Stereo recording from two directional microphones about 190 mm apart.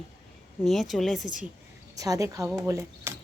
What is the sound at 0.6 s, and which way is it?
Speech, centre (ahead or behind).